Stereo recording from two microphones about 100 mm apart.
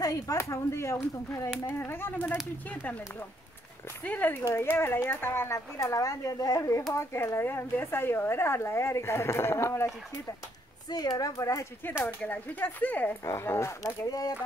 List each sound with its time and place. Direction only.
0.0 s speech: 35° left (ahead or behind); by 3.0 s 15° left (ahead or behind)
4.0 s speech: 20° left (ahead or behind)
10.9 s speech: 40° left (ahead or behind)
12.2 s speech: 15° left (ahead or behind)
13.2 s speech: 30° left (ahead or behind)